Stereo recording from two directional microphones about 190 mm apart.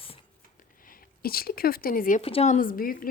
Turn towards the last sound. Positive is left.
turn(degrees=50)  # may be behind; listen again after turning